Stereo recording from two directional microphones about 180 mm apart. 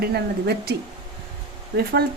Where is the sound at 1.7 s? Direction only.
60° right (ahead or behind).